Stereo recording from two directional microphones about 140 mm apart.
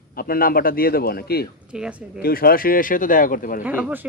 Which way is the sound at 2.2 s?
90° left.